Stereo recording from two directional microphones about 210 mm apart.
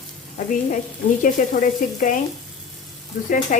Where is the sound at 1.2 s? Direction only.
40° left (ahead or behind).